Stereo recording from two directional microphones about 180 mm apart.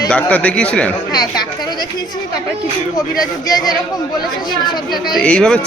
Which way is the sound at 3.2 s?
20° left (ahead or behind).